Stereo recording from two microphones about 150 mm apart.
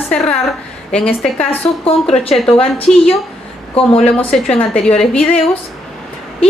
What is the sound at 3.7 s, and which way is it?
Speech, 40° left (ahead or behind).